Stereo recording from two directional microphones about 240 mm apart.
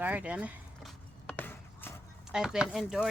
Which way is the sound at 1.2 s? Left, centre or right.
Centre.